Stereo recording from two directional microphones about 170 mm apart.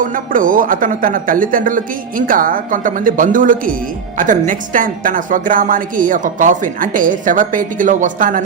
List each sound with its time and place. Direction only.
0.0 s a woman's voice: 50° right (ahead or behind)